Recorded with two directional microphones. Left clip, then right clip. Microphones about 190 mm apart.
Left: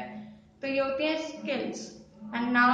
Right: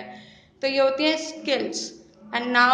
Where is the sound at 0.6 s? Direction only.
50° right (ahead or behind).